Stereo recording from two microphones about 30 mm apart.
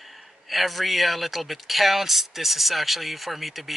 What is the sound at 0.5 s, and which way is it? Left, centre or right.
Speech, centre.